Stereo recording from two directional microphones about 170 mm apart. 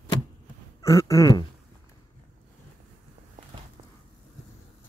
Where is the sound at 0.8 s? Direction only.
20° left (ahead or behind).